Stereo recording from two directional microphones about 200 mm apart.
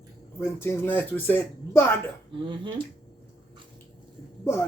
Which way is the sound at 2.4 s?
25° right (ahead or behind).